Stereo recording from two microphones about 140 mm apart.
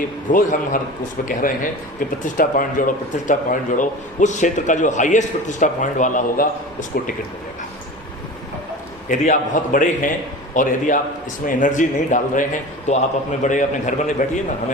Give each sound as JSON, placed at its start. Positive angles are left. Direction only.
{"t": 0.3, "sound": "a man's voice", "side_deg": 70}
{"t": 9.0, "sound": "a man's voice", "side_deg": 65}
{"t": 12.9, "sound": "speech", "side_deg": 55}